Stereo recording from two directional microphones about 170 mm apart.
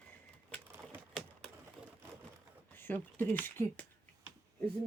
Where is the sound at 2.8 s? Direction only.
10° left (ahead or behind).